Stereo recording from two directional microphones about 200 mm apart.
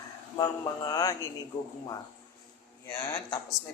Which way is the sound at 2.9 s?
20° left (ahead or behind).